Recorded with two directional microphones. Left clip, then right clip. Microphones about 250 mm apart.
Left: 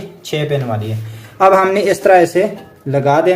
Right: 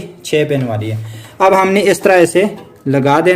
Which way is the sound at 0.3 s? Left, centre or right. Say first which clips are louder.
Right 4 dB; right.